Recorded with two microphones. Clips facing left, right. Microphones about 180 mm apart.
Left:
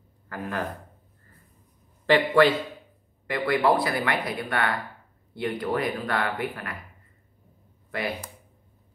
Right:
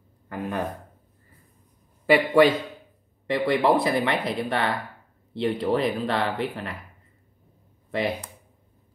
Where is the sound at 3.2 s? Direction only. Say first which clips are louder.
Right 2 dB; 25° right (ahead or behind).